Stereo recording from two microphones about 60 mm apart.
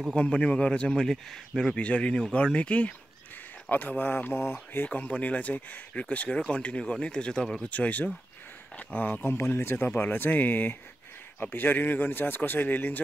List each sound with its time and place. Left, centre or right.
0.1 s speech: centre
1.8 s speech: left
4.8 s speech: left
9.6 s speech: left
9.8 s speech: left